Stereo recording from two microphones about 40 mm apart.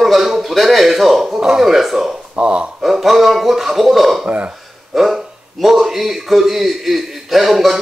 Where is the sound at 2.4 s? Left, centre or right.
Right.